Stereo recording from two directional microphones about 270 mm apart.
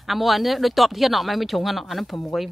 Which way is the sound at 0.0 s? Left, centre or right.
Centre.